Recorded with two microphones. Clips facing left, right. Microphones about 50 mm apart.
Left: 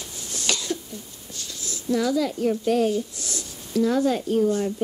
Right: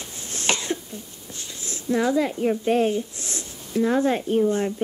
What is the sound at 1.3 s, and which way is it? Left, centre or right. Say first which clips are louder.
A woman's voice: even; right.